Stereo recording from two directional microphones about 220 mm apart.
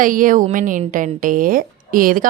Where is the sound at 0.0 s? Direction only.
40° right (ahead or behind).